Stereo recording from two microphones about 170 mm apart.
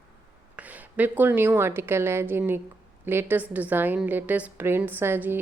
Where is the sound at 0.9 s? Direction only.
10° right (ahead or behind).